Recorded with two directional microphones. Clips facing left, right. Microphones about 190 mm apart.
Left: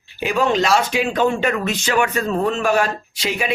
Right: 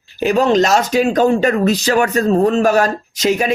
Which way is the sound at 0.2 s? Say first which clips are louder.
Right 5 dB; 40° right (ahead or behind).